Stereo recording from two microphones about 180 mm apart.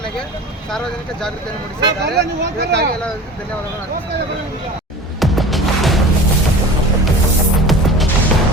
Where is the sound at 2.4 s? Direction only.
65° right (ahead or behind).